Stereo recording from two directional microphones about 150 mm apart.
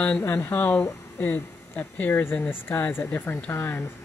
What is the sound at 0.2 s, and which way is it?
Speech, 15° left (ahead or behind).